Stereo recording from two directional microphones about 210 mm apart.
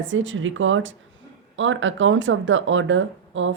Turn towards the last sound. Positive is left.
turn(degrees=-65)  # may be behind; listen again after turning